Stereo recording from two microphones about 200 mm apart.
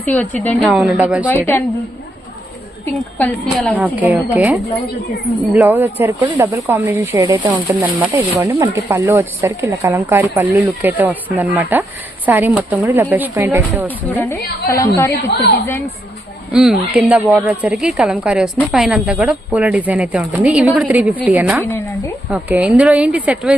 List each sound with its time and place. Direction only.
0.0 s a woman's voice: 10° left (ahead or behind)
0.7 s speech: 5° right (ahead or behind)
2.8 s a woman's voice: 5° left (ahead or behind)
3.8 s speech: 10° right (ahead or behind)
5.6 s speech: 10° right (ahead or behind)
7.7 s speech: 10° right (ahead or behind)
13.8 s a woman's voice: 10° left (ahead or behind)
15.2 s a woman's voice: 55° left (ahead or behind)
16.5 s a woman's voice: 5° right (ahead or behind)